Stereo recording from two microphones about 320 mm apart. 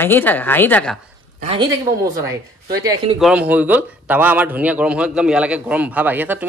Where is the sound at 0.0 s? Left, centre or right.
Centre.